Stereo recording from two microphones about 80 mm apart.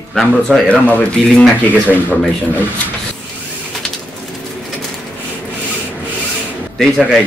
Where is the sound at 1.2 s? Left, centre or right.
Centre.